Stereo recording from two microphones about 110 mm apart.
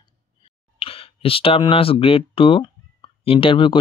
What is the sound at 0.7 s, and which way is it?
Clicking, 60° left (ahead or behind).